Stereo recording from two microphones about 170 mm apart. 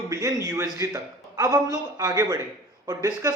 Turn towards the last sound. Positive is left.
turn(degrees=-20)  # may be behind; listen again after turning